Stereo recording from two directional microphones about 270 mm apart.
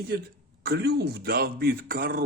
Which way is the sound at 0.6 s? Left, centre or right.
Right.